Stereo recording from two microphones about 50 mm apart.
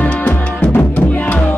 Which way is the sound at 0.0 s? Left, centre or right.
Left.